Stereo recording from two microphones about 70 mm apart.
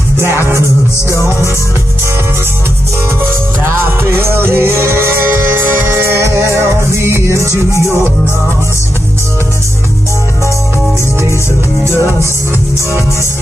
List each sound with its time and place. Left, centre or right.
1.1 s music: left
3.6 s music: right